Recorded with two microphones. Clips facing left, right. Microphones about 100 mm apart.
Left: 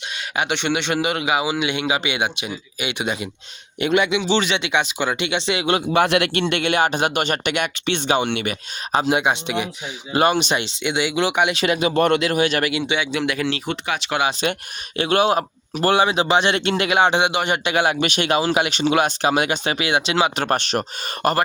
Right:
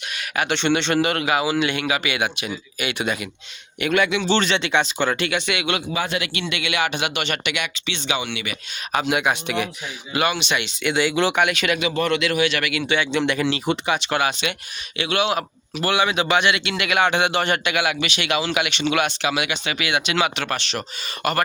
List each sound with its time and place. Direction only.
0.3 s a man's voice: 15° left (ahead or behind); by 5.8 s 35° left (ahead or behind)
5.9 s a man's voice: 65° left (ahead or behind)
6.5 s speech: 50° left (ahead or behind)
8.9 s speech: 30° left (ahead or behind)
10.1 s speech: 40° left (ahead or behind)
10.8 s a man's voice: 15° left (ahead or behind)
11.5 s speech: 30° left (ahead or behind)
12.9 s speech: 10° left (ahead or behind)
14.4 s speech: 40° left (ahead or behind); by 17.6 s 15° left (ahead or behind)
17.6 s speech: 30° left (ahead or behind)
18.0 s speech: 45° left (ahead or behind)